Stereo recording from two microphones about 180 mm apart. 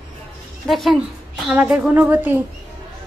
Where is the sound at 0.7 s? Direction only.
Centre (ahead or behind).